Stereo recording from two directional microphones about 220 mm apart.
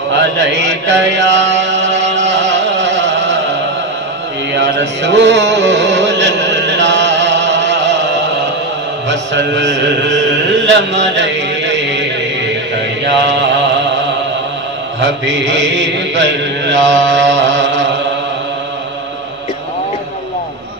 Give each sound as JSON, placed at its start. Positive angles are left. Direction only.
{"t": 0.2, "sound": "chant", "side_deg": -50}
{"t": 4.6, "sound": "music", "side_deg": -55}
{"t": 9.1, "sound": "mantra", "side_deg": -55}
{"t": 13.0, "sound": "mantra", "side_deg": -55}
{"t": 15.8, "sound": "mantra", "side_deg": -55}